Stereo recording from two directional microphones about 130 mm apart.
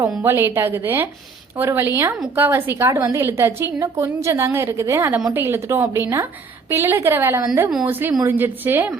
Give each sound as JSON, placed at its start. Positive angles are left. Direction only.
{"t": 0.2, "sound": "a woman's voice", "side_deg": -20}